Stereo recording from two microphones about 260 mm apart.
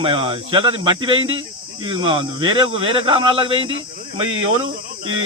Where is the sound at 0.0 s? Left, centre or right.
Centre.